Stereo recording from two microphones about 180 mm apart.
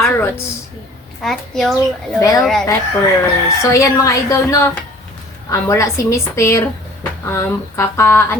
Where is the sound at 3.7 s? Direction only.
15° left (ahead or behind).